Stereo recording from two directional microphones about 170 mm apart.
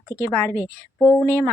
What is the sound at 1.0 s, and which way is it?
Speech, 15° left (ahead or behind).